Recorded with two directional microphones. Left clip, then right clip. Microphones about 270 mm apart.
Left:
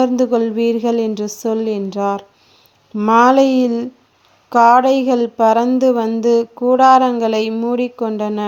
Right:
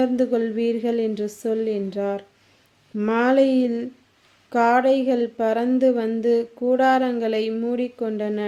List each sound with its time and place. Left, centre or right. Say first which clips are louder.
0.0 s speech: left 6 dB; centre